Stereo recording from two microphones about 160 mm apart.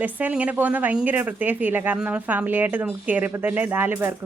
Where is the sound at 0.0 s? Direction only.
10° right (ahead or behind).